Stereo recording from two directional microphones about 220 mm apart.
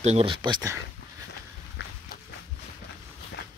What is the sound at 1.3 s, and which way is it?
Walk, 50° left (ahead or behind).